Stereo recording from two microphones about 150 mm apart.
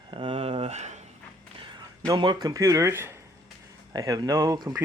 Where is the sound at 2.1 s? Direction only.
30° right (ahead or behind).